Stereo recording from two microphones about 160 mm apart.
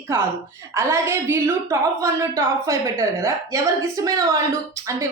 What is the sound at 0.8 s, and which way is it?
A woman's voice, 15° right (ahead or behind).